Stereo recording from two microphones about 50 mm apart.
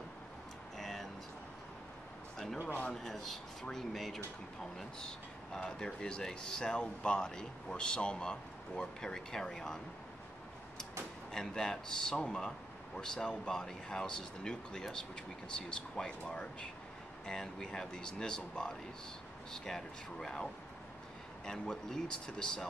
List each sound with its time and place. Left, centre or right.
0.7 s vehicle: centre
2.3 s a sound: centre
2.9 s speech: centre
11.3 s speech: centre
21.5 s speech: centre